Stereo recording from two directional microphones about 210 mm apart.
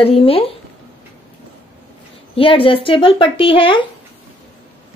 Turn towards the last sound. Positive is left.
turn(degrees=25)  # may be behind; listen again after turning